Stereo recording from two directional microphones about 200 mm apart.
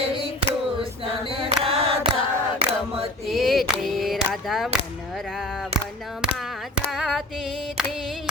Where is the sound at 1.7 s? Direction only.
30° right (ahead or behind).